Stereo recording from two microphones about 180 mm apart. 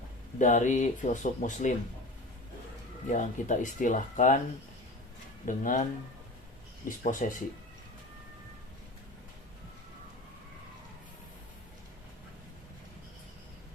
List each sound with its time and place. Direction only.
0.3 s speech: 45° left (ahead or behind)
3.1 s speech: 45° left (ahead or behind)
5.5 s speech: 45° left (ahead or behind)